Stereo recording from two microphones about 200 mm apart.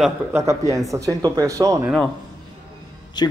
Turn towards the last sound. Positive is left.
turn(degrees=20)  # may be behind; listen again after turning